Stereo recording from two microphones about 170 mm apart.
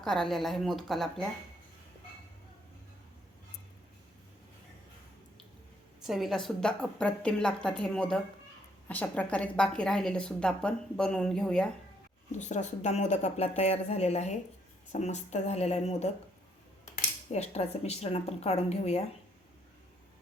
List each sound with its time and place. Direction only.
0.0 s a woman's voice: 5° left (ahead or behind)
6.0 s a woman's voice: centre (ahead or behind)
12.4 s speech: 45° left (ahead or behind)
17.3 s speech: 40° left (ahead or behind)